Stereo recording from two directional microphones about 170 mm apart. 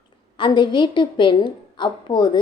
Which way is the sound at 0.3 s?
25° left (ahead or behind).